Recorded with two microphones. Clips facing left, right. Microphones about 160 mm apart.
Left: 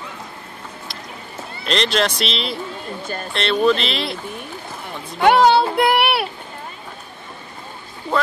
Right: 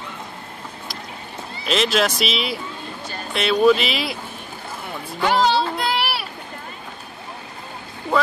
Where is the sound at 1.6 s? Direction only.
5° right (ahead or behind).